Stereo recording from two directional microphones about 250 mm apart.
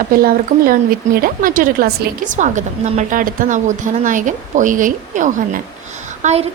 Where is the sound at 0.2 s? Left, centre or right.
Right.